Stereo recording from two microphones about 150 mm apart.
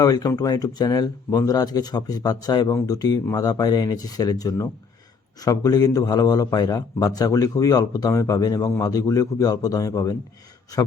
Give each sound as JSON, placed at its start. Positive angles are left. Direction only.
{"t": 0.0, "sound": "a man's voice", "side_deg": 25}